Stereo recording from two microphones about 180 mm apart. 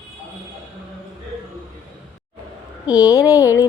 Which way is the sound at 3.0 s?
20° left (ahead or behind).